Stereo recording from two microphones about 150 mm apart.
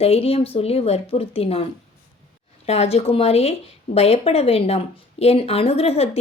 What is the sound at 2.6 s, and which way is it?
A woman's voice, 45° left (ahead or behind).